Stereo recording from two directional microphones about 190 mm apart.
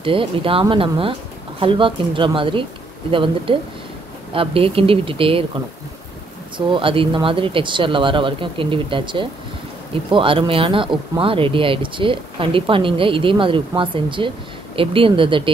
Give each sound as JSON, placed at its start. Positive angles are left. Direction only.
{"t": 0.0, "sound": "speech", "side_deg": -25}
{"t": 6.7, "sound": "speech", "side_deg": -25}